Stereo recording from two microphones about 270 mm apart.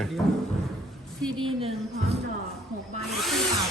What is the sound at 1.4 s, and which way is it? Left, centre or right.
Speech, centre.